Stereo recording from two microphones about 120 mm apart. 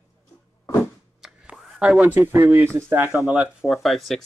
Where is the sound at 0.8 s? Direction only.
5° right (ahead or behind).